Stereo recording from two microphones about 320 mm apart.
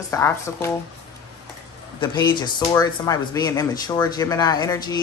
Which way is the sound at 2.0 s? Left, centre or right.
Centre.